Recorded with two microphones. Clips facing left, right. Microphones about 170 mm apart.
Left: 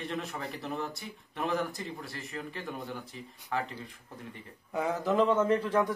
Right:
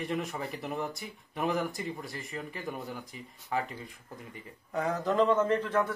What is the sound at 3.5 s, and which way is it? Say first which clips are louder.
Speech: right 1 dB; 10° right (ahead or behind).